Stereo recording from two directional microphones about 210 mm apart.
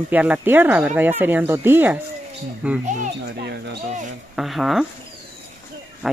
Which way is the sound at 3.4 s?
55° right (ahead or behind).